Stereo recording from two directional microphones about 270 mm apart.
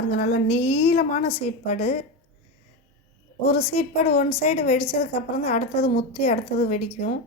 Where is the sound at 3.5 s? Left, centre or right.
Left.